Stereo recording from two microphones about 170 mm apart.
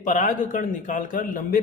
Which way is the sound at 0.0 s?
45° left (ahead or behind).